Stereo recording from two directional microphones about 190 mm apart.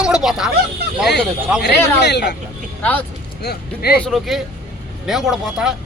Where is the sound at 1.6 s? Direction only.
60° left (ahead or behind).